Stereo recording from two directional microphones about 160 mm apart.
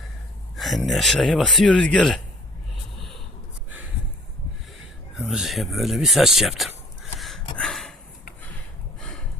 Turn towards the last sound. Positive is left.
turn(degrees=5)  # may be behind; listen again after turning